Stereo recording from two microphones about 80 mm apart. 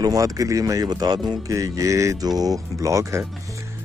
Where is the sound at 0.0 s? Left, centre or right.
Right.